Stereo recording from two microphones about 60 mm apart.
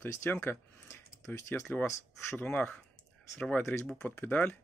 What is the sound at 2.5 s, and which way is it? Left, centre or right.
Speech, left.